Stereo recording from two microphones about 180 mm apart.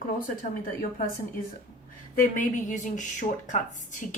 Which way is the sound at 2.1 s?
45° left (ahead or behind).